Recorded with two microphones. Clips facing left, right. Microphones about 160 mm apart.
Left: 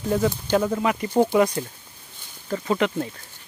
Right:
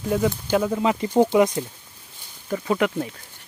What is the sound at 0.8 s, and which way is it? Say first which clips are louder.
Speech: right 2 dB; 20° right (ahead or behind).